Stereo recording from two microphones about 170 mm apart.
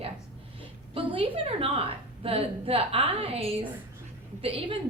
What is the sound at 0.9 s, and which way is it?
A woman's voice, 30° right (ahead or behind).